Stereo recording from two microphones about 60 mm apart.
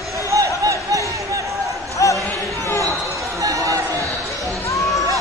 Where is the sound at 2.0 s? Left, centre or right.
Left.